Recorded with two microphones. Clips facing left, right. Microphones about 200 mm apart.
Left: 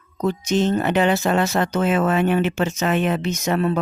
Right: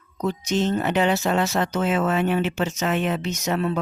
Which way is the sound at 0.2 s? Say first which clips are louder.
Left 3 dB; 55° left (ahead or behind).